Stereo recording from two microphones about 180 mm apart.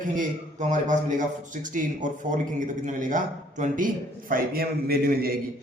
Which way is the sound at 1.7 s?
45° right (ahead or behind).